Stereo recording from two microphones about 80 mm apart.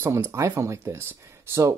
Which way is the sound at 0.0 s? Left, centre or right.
Right.